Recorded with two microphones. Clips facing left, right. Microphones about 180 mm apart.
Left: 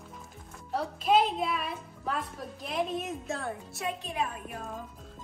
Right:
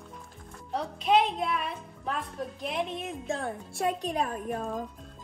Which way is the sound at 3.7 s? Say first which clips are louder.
Right 6 dB; 40° right (ahead or behind).